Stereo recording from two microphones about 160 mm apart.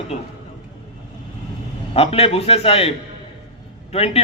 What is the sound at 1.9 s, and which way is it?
A man's voice, 40° left (ahead or behind).